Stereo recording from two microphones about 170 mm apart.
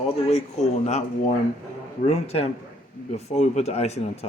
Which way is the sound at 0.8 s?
40° left (ahead or behind).